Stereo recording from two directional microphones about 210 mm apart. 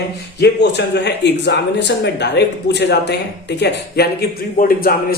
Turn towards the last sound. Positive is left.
turn(degrees=45)  # may be behind; listen again after turning